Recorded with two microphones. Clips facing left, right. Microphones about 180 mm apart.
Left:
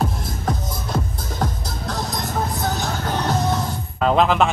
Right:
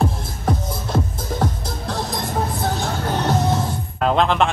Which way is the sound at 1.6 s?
30° right (ahead or behind).